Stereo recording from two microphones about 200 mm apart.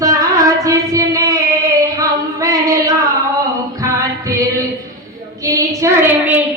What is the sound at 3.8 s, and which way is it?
Music, 15° right (ahead or behind).